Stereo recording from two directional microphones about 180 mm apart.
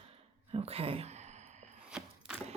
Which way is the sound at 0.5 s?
35° right (ahead or behind).